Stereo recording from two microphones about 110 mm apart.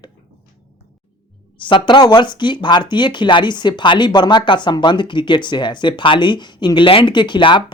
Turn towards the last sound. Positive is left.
turn(degrees=45)  # may be behind; listen again after turning